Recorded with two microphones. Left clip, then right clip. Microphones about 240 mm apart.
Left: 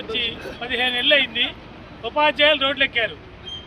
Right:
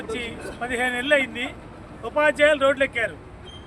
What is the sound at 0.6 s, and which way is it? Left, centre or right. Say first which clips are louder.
Speech: left 4 dB; centre.